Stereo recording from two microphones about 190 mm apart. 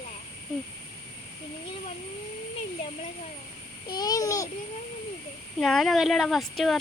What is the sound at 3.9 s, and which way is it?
Babbling, 20° left (ahead or behind).